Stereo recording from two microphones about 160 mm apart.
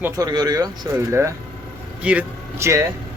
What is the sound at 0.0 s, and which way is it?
Speech, 25° right (ahead or behind).